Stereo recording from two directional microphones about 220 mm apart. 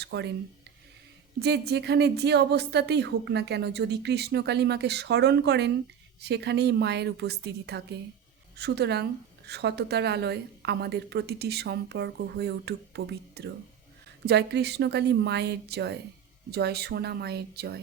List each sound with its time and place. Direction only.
0.0 s speech: 50° right (ahead or behind)
1.4 s a woman's voice: 50° right (ahead or behind)